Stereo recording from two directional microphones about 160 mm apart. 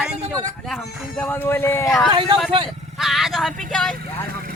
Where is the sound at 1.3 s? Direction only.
15° left (ahead or behind).